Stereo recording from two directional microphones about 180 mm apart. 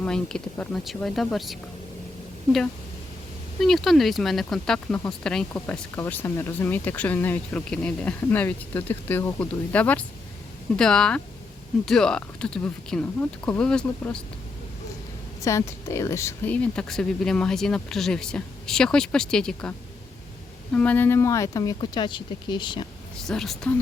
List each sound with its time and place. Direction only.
0.0 s speech: 5° left (ahead or behind)
3.6 s speech: centre (ahead or behind)
15.4 s speech: 15° left (ahead or behind)
20.7 s speech: 10° left (ahead or behind); by 22.9 s 25° left (ahead or behind)
23.2 s speech: centre (ahead or behind)